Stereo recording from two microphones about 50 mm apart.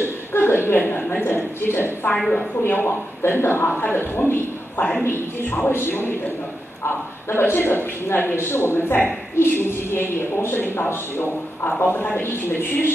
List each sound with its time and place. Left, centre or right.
0.3 s chuckle: left
1.2 s a sound: left
2.1 s a woman's voice: centre
2.6 s speech: left
3.2 s a man's voice: left
7.2 s a man's voice: left
12.3 s a man's voice: left